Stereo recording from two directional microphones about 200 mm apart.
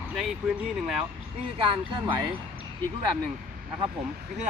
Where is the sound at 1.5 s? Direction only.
25° right (ahead or behind).